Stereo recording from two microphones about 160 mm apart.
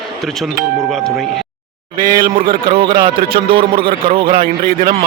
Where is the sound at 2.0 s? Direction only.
65° right (ahead or behind).